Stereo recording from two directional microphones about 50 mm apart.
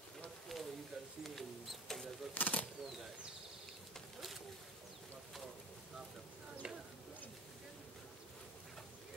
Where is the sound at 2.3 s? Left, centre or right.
Left.